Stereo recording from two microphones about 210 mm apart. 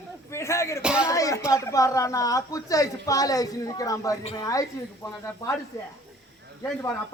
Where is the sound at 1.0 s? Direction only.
15° left (ahead or behind).